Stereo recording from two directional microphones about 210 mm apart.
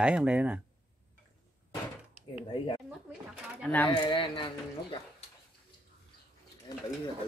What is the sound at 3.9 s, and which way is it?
Speech, 25° left (ahead or behind).